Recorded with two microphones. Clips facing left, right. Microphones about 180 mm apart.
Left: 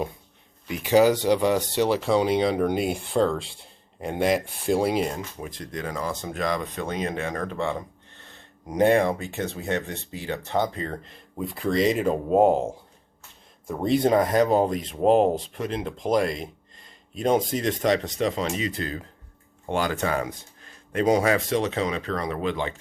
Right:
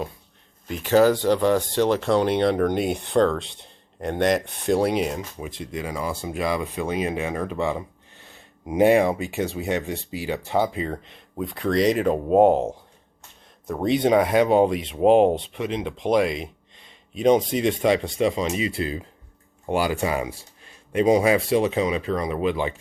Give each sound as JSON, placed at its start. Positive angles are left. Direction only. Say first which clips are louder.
{"t": 0.7, "sound": "speech", "louder": "right 1 dB", "side_deg": 10}
{"t": 13.7, "sound": "speech", "louder": "right 1 dB", "side_deg": 0}
{"t": 18.5, "sound": "speech", "louder": "right 3 dB", "side_deg": 40}
{"t": 18.8, "sound": "speech", "louder": "right 4 dB", "side_deg": -10}
{"t": 20.9, "sound": "speech", "louder": "right 3 dB", "side_deg": 0}